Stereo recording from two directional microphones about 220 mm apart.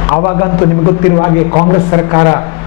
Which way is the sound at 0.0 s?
20° left (ahead or behind).